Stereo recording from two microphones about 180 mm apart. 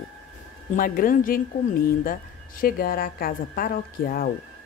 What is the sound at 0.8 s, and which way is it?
Speech, 50° left (ahead or behind).